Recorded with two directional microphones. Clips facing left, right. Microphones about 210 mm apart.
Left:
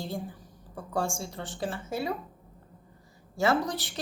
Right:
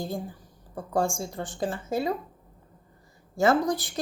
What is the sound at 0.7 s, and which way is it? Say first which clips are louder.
A woman's voice: right 4 dB; 45° right (ahead or behind).